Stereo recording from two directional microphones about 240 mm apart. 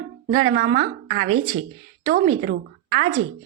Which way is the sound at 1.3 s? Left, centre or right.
Right.